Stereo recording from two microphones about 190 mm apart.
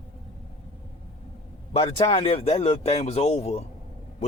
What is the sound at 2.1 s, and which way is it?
Speech, 30° left (ahead or behind).